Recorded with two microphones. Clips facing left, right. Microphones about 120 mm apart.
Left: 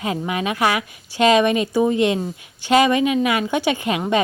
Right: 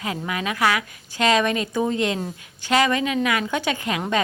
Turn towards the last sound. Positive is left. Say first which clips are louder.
# left 4 dB
turn(degrees=20)  # may be behind; listen again after turning